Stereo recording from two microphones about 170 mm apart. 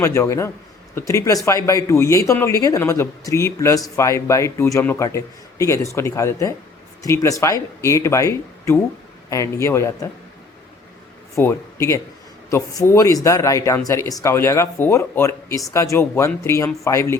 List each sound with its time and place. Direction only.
0.0 s a man's voice: 15° left (ahead or behind)
11.3 s a man's voice: 15° left (ahead or behind)